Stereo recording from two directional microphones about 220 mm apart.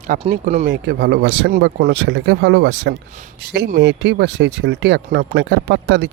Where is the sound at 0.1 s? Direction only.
35° right (ahead or behind).